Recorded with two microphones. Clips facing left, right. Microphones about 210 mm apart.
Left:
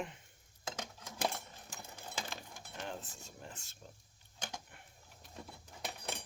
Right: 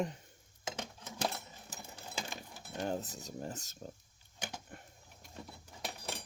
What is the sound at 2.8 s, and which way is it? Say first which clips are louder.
Speech: right 8 dB; 40° right (ahead or behind).